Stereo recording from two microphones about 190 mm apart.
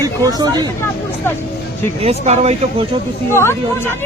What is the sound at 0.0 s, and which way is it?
Speech, 20° right (ahead or behind).